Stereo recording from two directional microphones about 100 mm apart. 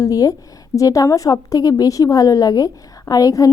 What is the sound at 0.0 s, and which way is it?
A woman's voice, 35° left (ahead or behind).